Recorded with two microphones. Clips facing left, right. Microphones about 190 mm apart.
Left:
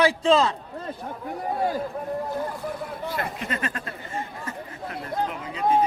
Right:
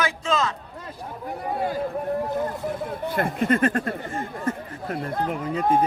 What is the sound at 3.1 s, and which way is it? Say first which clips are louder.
Speech: right 11 dB; 50° right (ahead or behind).